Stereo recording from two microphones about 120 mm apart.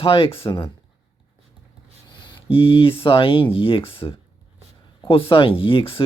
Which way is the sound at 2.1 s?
40° left (ahead or behind).